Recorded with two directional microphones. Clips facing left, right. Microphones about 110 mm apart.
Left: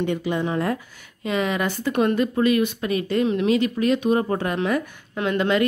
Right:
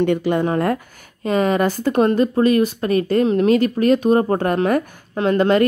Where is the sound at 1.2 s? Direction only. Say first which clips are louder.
Right 6 dB; 40° right (ahead or behind).